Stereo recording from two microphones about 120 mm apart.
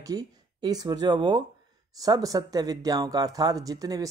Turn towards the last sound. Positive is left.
turn(degrees=-30)  # may be behind; listen again after turning